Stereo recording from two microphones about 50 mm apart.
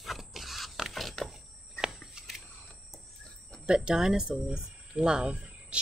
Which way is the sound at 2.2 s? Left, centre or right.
Centre.